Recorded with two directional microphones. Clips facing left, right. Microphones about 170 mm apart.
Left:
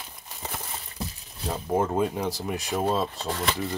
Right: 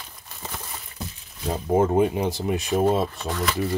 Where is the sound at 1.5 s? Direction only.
25° right (ahead or behind).